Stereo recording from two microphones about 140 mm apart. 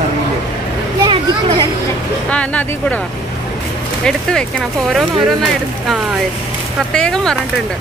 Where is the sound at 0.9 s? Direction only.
35° right (ahead or behind).